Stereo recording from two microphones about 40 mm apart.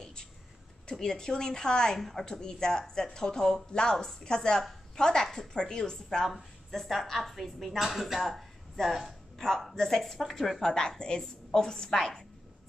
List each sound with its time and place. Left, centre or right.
0.9 s a woman's voice: centre
2.0 s a woman's voice: centre
2.2 s a woman's voice: centre
10.2 s a woman's voice: centre
10.7 s a woman's voice: centre